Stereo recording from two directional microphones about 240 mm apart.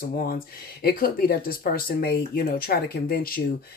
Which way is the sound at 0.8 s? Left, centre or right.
Left.